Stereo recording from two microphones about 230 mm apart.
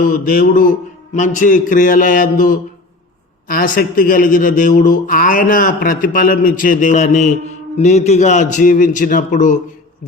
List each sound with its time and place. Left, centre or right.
0.3 s a man's voice: left